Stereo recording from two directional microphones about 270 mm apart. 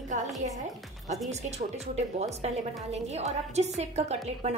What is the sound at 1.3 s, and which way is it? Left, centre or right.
A woman's voice, right.